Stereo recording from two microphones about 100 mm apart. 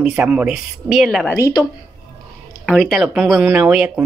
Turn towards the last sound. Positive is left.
turn(degrees=-10)  # may be behind; listen again after turning